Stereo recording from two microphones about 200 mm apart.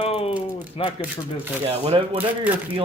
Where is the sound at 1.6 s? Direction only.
30° right (ahead or behind).